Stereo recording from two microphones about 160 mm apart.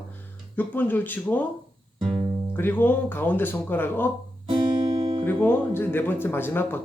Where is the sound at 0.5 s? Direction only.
10° left (ahead or behind).